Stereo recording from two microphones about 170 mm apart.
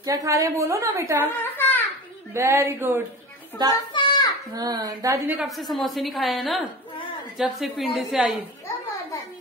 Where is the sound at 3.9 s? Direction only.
25° left (ahead or behind).